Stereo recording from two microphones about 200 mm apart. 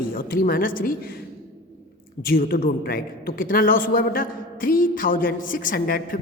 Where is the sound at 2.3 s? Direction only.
50° left (ahead or behind).